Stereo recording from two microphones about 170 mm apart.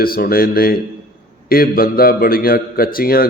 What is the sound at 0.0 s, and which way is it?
A man's voice, 60° left (ahead or behind).